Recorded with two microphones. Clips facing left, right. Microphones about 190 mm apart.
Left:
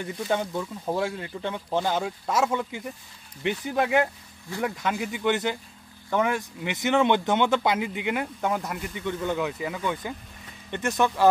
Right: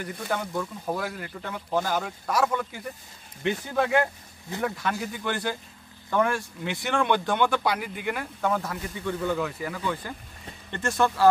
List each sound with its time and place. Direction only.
0.0 s speech: 25° left (ahead or behind)